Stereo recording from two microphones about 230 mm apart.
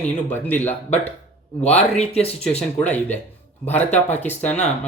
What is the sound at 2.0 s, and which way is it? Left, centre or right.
Speech, left.